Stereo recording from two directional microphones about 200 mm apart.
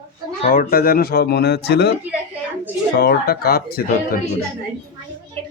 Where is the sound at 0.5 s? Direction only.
45° left (ahead or behind).